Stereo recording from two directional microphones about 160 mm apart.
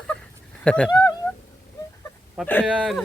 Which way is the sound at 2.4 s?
10° left (ahead or behind).